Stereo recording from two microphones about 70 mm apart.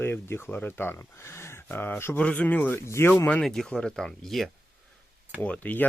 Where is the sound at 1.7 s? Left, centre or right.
Left.